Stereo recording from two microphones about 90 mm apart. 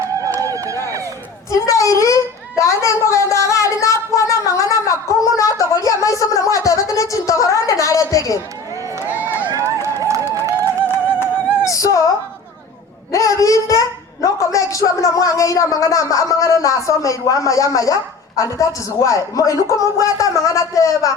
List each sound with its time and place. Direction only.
0.3 s run: 40° right (ahead or behind)
1.5 s a sound: 40° left (ahead or behind)
9.8 s run: 35° right (ahead or behind)
10.8 s music: 25° left (ahead or behind)
13.1 s a child's voice: 40° left (ahead or behind)